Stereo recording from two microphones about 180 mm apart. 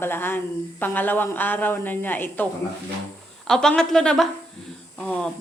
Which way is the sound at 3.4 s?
5° left (ahead or behind).